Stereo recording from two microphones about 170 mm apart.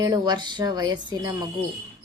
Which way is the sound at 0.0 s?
25° right (ahead or behind).